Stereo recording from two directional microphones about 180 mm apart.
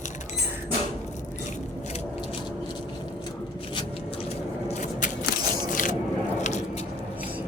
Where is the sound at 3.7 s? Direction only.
30° left (ahead or behind).